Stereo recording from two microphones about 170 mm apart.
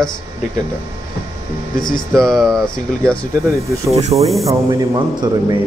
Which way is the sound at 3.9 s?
40° right (ahead or behind).